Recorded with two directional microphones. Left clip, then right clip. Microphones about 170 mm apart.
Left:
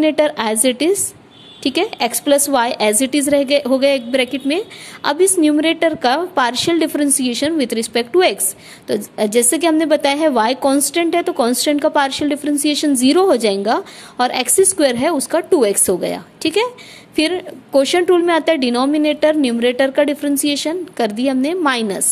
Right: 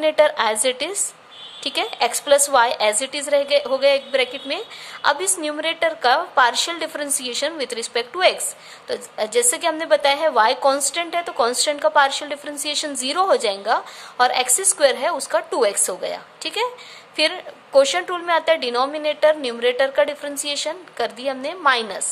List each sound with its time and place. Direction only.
0.0 s a woman's voice: 30° left (ahead or behind)